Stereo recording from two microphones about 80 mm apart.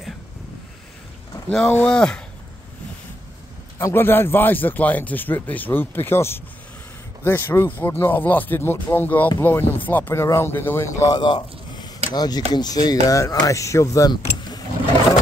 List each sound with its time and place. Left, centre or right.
1.9 s speech: centre
3.7 s a man's voice: left
11.1 s speech: left
13.2 s speech: left